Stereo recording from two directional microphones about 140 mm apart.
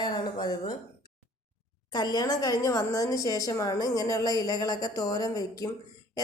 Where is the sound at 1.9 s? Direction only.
30° left (ahead or behind).